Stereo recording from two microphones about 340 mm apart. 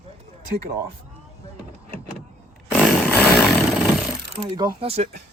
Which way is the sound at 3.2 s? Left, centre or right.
Centre.